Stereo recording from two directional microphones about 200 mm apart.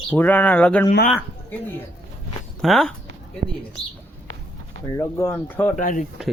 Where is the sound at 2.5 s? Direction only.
Centre (ahead or behind).